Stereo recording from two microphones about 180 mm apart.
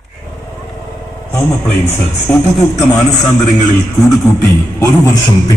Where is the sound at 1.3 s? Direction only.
15° left (ahead or behind).